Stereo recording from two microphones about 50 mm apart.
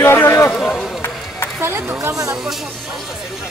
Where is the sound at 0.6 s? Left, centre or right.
Centre.